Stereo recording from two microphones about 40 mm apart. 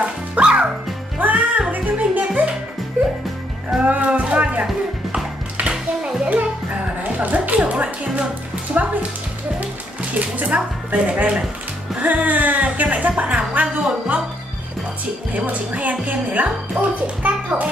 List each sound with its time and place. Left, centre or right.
0.0 s music: right
1.2 s music: right
3.8 s music: right
6.3 s music: right
7.7 s speech: right
10.1 s speech: right
13.7 s music: right
15.3 s a child's voice: right